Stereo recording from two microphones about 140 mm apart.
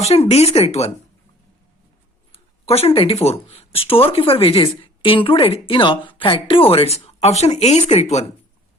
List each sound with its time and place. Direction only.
0.0 s speech: 50° left (ahead or behind)
2.3 s speech: 45° left (ahead or behind)